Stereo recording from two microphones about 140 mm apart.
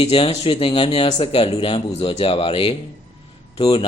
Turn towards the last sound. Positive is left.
turn(degrees=40)  # may be behind; listen again after turning